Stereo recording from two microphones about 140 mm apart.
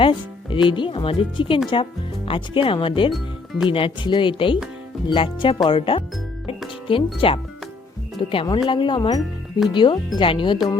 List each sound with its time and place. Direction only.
0.0 s speech: 35° left (ahead or behind)
3.1 s music: centre (ahead or behind)
3.7 s speech: 40° left (ahead or behind)